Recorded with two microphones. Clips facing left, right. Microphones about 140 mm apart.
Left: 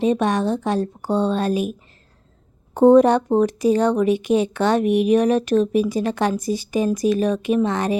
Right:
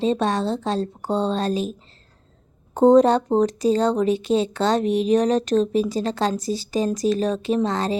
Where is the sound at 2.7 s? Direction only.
15° right (ahead or behind).